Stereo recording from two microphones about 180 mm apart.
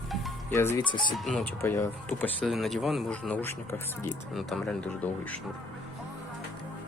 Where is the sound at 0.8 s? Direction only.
25° left (ahead or behind).